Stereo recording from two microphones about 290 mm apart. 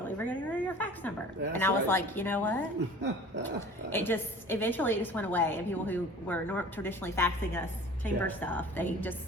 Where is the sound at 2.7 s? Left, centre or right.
Right.